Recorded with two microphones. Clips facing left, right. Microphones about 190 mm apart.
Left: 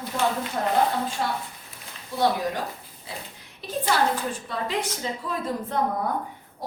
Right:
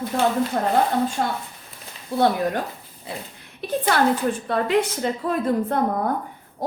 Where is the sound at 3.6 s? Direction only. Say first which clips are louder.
Right 3 dB; 60° right (ahead or behind).